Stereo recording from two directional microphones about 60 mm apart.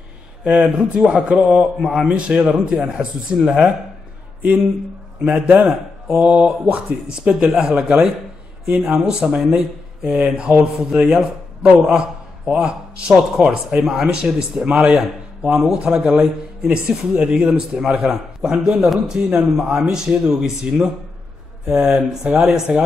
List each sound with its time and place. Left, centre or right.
0.4 s a man's voice: centre
2.0 s a man's voice: centre
5.2 s a man's voice: centre
5.7 s speech: centre
6.2 s mantra: centre
7.2 s a man's voice: centre
22.7 s mantra: centre